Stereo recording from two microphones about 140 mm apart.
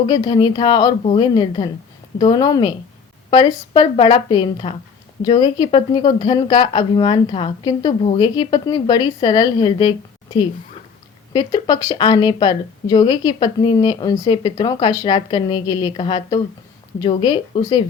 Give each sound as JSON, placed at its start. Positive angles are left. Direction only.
{"t": 0.1, "sound": "a woman's voice", "side_deg": 30}
{"t": 11.3, "sound": "a woman's voice", "side_deg": 30}